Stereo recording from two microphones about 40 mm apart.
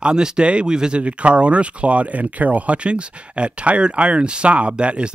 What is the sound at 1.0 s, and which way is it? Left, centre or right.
Speech, right.